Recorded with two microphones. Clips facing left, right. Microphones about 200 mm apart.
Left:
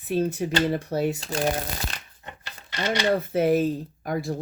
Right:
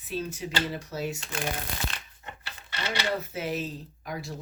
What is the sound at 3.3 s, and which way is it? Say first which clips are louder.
Speech: left 11 dB; 55° left (ahead or behind).